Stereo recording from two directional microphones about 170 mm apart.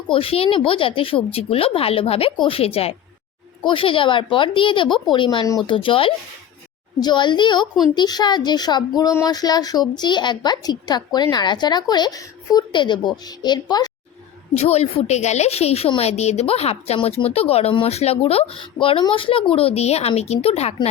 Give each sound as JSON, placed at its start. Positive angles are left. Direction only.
{"t": 0.1, "sound": "a woman's voice", "side_deg": 35}
{"t": 14.5, "sound": "a woman's voice", "side_deg": 40}